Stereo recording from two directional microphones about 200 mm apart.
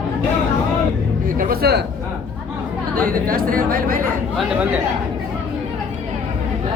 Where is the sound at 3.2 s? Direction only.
45° right (ahead or behind).